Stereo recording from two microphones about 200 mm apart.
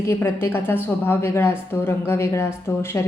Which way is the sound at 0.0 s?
10° left (ahead or behind).